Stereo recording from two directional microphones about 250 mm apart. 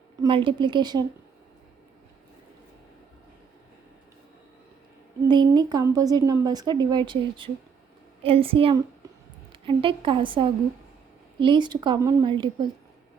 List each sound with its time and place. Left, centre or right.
0.2 s a woman's voice: right
5.3 s a woman's voice: centre